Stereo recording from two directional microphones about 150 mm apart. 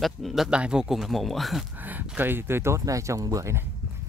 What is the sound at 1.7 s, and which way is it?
Speech, 10° right (ahead or behind).